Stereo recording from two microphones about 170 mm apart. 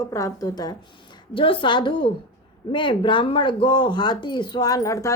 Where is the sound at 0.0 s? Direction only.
15° left (ahead or behind).